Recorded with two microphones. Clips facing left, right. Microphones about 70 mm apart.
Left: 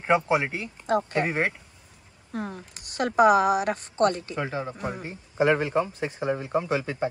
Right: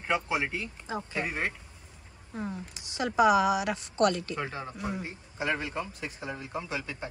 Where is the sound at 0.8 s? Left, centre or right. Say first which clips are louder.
Left 12 dB; left.